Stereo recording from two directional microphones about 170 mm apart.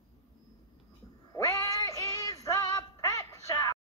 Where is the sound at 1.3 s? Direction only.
20° left (ahead or behind).